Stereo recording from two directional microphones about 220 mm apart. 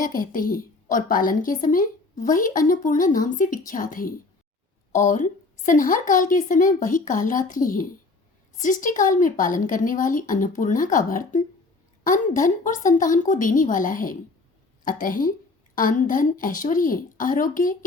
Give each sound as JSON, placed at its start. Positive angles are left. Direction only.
{"t": 0.0, "sound": "a woman's voice", "side_deg": 40}